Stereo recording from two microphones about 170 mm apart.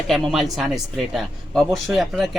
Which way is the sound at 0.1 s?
Centre (ahead or behind).